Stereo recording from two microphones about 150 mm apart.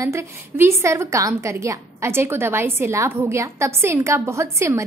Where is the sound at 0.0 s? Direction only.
20° right (ahead or behind).